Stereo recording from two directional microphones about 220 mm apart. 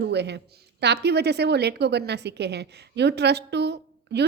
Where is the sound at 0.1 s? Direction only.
50° right (ahead or behind).